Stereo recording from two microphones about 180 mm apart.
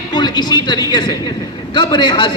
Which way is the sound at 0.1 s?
25° left (ahead or behind).